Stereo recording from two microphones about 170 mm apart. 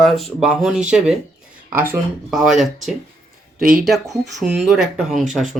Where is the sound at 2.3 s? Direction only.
Centre (ahead or behind).